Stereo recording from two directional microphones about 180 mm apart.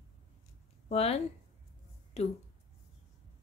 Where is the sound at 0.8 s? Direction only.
35° left (ahead or behind).